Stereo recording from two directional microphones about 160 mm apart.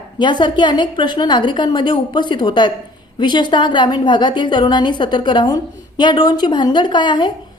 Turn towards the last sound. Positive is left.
turn(degrees=30)  # may be behind; listen again after turning